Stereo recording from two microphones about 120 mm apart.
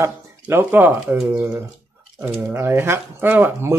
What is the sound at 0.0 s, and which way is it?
Speech, 20° right (ahead or behind).